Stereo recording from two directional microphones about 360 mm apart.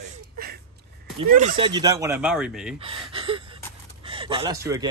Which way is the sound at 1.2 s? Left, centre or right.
Centre.